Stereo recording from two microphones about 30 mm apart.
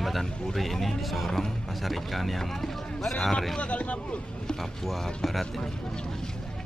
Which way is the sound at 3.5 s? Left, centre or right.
Left.